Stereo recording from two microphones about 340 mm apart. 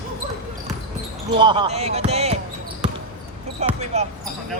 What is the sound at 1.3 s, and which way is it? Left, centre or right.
Speech, centre.